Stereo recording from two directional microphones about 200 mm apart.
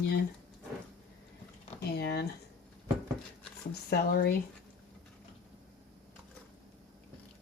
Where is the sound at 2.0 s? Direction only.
55° left (ahead or behind).